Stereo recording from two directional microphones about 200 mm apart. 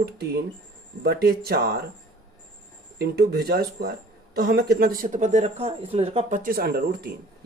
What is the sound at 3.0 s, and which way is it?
Speech, 50° right (ahead or behind).